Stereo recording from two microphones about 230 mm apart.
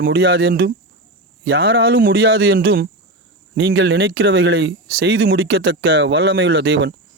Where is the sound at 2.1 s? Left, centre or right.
Right.